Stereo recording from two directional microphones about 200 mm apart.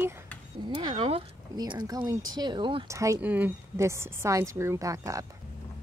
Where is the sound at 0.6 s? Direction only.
20° right (ahead or behind).